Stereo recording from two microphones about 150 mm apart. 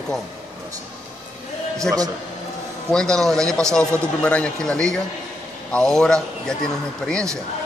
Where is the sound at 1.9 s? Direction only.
5° left (ahead or behind).